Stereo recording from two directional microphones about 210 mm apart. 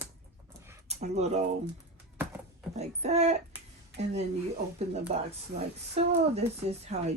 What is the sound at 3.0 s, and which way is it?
Speech, 30° right (ahead or behind).